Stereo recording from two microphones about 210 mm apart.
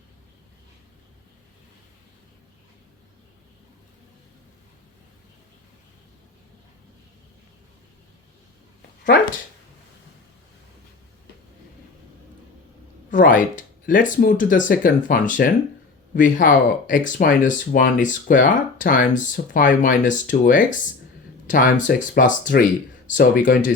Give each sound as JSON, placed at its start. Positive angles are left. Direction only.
{"t": 13.1, "sound": "speech", "side_deg": 40}